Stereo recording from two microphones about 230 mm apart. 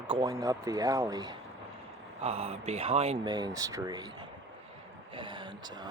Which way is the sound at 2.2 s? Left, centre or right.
Right.